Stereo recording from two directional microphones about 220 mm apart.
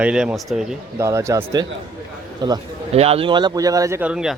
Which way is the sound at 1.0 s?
15° right (ahead or behind).